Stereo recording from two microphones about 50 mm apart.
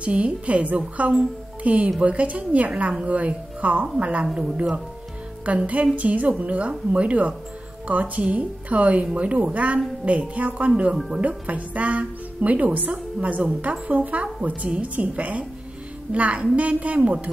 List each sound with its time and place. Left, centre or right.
0.0 s speech: right
4.3 s speech: centre
5.4 s speech: right